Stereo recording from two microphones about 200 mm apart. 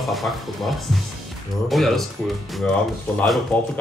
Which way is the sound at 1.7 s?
Centre (ahead or behind).